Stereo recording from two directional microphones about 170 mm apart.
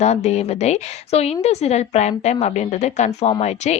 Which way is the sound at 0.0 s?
40° left (ahead or behind).